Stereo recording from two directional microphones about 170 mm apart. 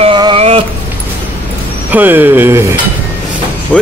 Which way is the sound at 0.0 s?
30° right (ahead or behind).